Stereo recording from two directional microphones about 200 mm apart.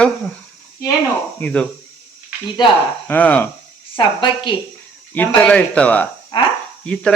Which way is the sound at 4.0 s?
25° left (ahead or behind).